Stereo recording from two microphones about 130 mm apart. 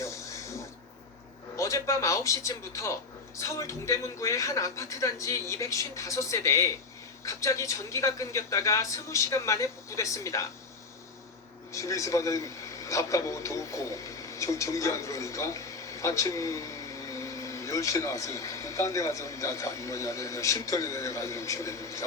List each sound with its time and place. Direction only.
0.0 s a sound: 25° left (ahead or behind)
1.5 s a man's voice: 25° left (ahead or behind)
11.7 s speech: 25° left (ahead or behind)